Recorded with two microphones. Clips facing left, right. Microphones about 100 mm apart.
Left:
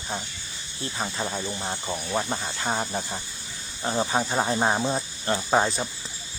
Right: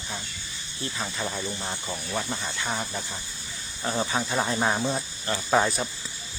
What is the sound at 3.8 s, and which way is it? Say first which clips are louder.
Speech: left 2 dB; 25° left (ahead or behind).